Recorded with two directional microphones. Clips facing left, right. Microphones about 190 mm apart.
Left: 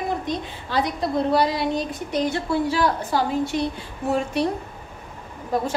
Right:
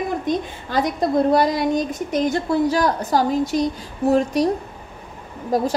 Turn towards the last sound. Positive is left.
turn(degrees=-40)  # may be behind; listen again after turning